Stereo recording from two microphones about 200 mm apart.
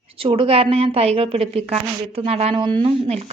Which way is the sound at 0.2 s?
25° right (ahead or behind).